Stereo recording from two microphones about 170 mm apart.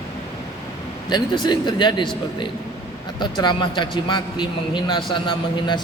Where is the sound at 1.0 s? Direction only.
25° left (ahead or behind).